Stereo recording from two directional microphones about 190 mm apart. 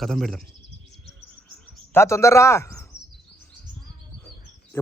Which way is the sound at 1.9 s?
15° left (ahead or behind).